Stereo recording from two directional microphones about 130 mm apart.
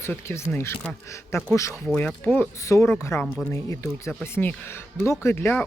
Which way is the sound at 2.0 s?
10° left (ahead or behind).